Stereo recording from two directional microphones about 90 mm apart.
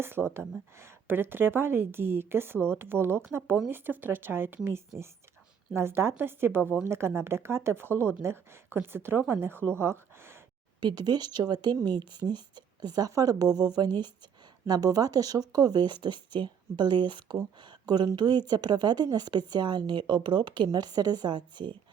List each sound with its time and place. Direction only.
0.3 s a woman's voice: 25° right (ahead or behind)
10.8 s speech: 50° right (ahead or behind)
13.1 s speech: 40° right (ahead or behind); by 21.8 s 60° right (ahead or behind)